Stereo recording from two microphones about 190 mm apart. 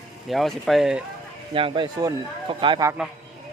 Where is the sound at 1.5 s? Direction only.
30° right (ahead or behind).